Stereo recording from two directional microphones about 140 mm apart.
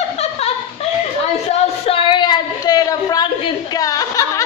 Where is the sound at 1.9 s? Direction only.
35° left (ahead or behind).